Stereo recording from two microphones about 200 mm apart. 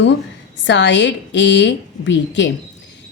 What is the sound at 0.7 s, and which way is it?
A woman's voice, 65° left (ahead or behind).